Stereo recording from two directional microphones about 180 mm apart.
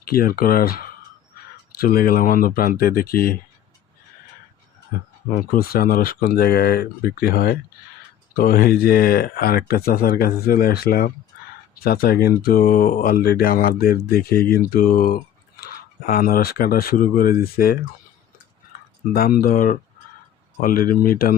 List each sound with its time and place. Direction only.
0.1 s speech: 55° left (ahead or behind)
5.3 s speech: 55° left (ahead or behind)
19.1 s speech: 55° left (ahead or behind)